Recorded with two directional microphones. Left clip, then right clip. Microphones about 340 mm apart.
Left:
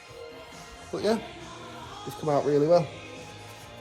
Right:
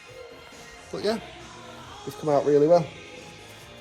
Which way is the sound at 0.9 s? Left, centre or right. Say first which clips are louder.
Left 1 dB; centre.